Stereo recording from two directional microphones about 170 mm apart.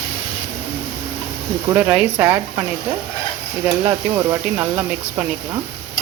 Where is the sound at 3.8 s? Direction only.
20° right (ahead or behind).